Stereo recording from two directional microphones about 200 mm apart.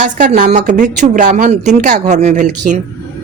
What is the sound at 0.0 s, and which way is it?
Speech, 40° right (ahead or behind).